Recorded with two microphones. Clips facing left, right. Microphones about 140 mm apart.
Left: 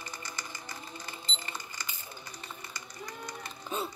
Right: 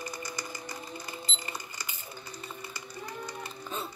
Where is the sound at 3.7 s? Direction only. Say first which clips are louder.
Left 3 dB; 15° left (ahead or behind).